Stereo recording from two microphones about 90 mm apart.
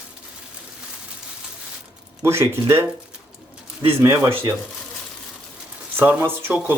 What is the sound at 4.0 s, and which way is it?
Speech, 35° right (ahead or behind).